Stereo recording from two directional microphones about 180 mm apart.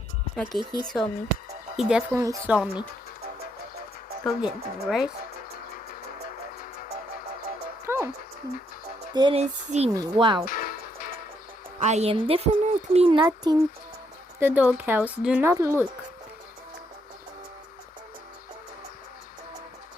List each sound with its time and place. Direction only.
0.3 s speech: centre (ahead or behind)
4.3 s speech: centre (ahead or behind)
7.9 s music: 15° right (ahead or behind)
9.1 s speech: 25° right (ahead or behind)
9.4 s speech: 35° right (ahead or behind)
9.9 s speech: 25° right (ahead or behind)
10.4 s music: 50° left (ahead or behind)
11.8 s speech: 40° right (ahead or behind); by 13.6 s 20° right (ahead or behind)
14.3 s speech: 10° right (ahead or behind)